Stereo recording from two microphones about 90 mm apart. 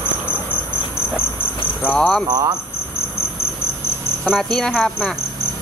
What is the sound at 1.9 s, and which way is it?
Speech, 10° left (ahead or behind).